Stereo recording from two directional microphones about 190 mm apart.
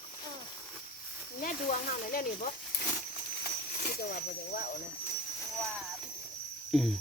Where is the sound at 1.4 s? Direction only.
45° left (ahead or behind).